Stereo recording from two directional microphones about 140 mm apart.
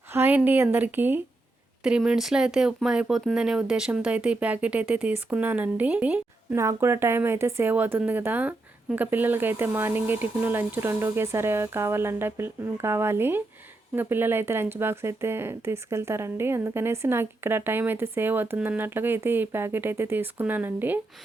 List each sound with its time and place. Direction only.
0.1 s speech: 15° right (ahead or behind)